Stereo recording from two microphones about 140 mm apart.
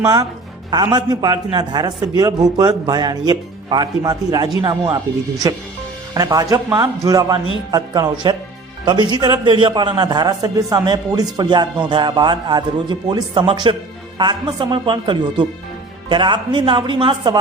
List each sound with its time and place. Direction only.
0.0 s a man's voice: 25° right (ahead or behind)